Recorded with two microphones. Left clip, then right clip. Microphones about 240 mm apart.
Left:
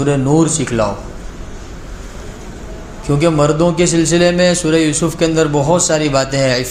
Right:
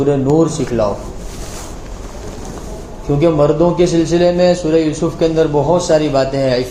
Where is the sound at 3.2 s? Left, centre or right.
Left.